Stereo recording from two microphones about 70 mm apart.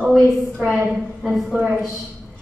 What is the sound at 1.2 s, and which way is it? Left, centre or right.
Speech, centre.